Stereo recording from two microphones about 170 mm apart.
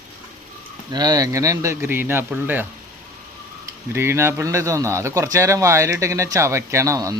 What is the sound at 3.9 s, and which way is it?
Speech, 15° right (ahead or behind).